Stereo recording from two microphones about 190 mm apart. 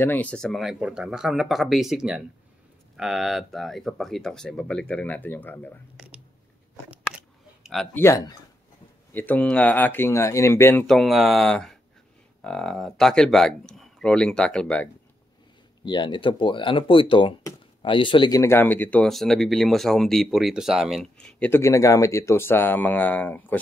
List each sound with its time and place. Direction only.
0.0 s speech: 10° left (ahead or behind)
7.6 s speech: centre (ahead or behind)
8.0 s speech: 20° left (ahead or behind)
15.8 s speech: 25° left (ahead or behind)